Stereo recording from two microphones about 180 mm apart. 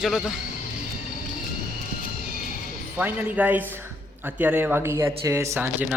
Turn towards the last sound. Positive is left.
turn(degrees=-15)  # may be behind; listen again after turning